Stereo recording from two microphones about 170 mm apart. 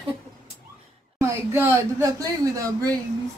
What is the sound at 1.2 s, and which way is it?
Speech, 15° right (ahead or behind).